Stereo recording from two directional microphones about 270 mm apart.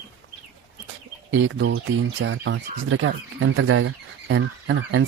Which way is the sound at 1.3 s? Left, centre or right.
Right.